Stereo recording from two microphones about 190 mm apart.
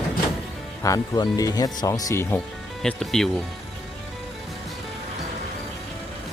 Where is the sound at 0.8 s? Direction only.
20° left (ahead or behind).